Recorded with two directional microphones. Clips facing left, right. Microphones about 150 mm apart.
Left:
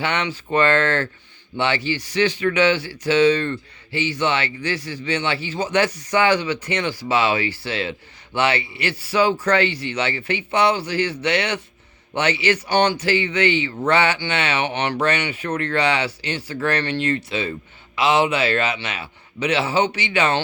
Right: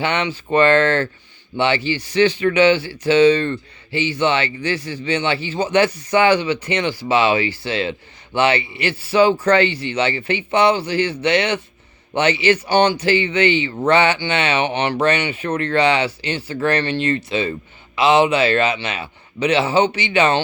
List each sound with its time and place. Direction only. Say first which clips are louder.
0.0 s speech: right 3 dB; 20° right (ahead or behind)